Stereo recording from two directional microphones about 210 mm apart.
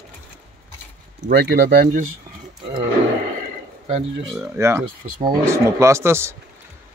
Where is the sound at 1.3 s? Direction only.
50° right (ahead or behind).